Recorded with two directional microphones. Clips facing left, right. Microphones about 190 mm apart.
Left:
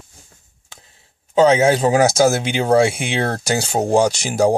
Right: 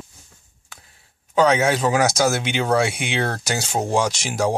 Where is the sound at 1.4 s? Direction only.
25° left (ahead or behind).